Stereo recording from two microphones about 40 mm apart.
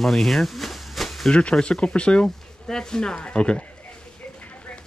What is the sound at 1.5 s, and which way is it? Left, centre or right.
Speech, left.